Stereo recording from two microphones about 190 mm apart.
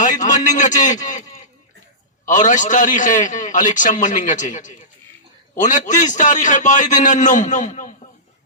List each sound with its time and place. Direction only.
0.0 s a man's voice: 40° left (ahead or behind)